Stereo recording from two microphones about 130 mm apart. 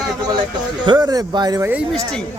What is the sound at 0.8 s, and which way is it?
Speech, 30° right (ahead or behind).